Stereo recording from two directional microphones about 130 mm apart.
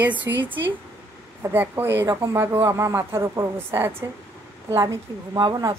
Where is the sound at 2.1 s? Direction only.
20° right (ahead or behind).